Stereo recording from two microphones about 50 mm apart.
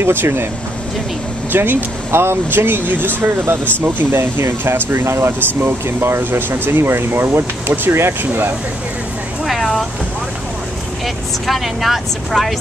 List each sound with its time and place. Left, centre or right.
0.0 s speech: right
1.5 s speech: right
9.4 s a sound: centre
11.4 s speech: centre